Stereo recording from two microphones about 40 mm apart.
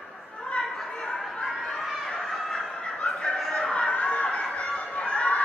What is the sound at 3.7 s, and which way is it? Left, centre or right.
Chatter, left.